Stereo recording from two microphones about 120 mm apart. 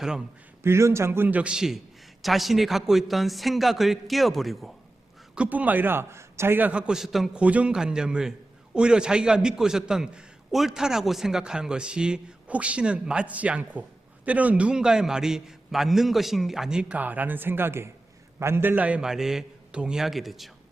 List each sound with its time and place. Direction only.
0.0 s a man's voice: 5° right (ahead or behind)
0.6 s a man's voice: 20° right (ahead or behind); by 4.7 s centre (ahead or behind)
5.3 s a man's voice: 10° right (ahead or behind)